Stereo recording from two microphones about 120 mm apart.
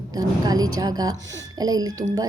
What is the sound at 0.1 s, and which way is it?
Speech, 30° right (ahead or behind).